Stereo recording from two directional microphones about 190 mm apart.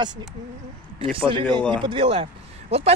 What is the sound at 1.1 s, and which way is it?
Speech, 25° right (ahead or behind).